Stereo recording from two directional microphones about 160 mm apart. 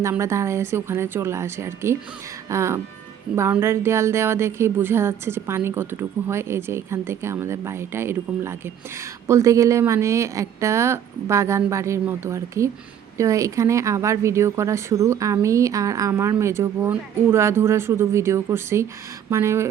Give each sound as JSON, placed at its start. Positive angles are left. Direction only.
{"t": 0.0, "sound": "speech", "side_deg": -15}